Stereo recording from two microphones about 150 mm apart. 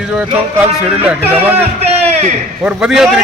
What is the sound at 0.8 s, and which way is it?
Speech, 10° right (ahead or behind).